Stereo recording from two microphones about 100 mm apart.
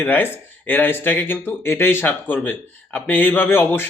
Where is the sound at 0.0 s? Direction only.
20° left (ahead or behind).